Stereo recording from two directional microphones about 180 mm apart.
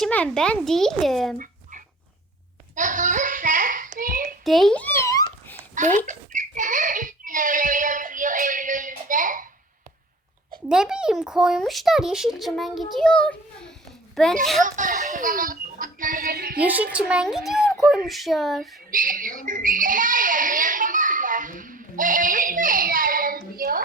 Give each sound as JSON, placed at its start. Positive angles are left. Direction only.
{"t": 0.0, "sound": "a child's voice", "side_deg": 5}
{"t": 2.7, "sound": "a sound", "side_deg": -45}
{"t": 4.4, "sound": "a child's voice", "side_deg": 0}
{"t": 5.7, "sound": "speech", "side_deg": -45}
{"t": 6.1, "sound": "a sound", "side_deg": -45}
{"t": 10.7, "sound": "a child's voice", "side_deg": -5}
{"t": 14.6, "sound": "speech", "side_deg": -45}
{"t": 16.6, "sound": "a child's voice", "side_deg": -10}
{"t": 18.9, "sound": "speech", "side_deg": -50}